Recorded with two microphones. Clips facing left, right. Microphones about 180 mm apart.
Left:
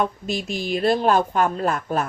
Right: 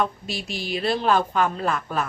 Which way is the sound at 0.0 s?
45° left (ahead or behind).